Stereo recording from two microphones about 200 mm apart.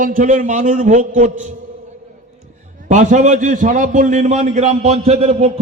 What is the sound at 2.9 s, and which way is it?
A man's voice, 40° right (ahead or behind).